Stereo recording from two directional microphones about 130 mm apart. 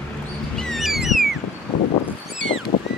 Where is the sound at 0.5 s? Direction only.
Centre (ahead or behind).